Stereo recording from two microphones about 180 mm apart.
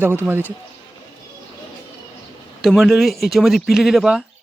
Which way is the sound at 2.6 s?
Centre (ahead or behind).